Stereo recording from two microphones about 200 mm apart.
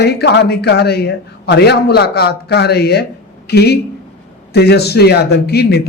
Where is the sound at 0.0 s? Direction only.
55° left (ahead or behind).